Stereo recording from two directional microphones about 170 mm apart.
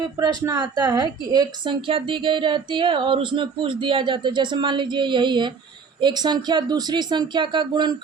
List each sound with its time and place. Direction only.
0.4 s speech: 25° right (ahead or behind)